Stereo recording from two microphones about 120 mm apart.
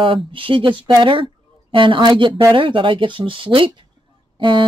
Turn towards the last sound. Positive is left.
turn(degrees=-45)  # may be behind; listen again after turning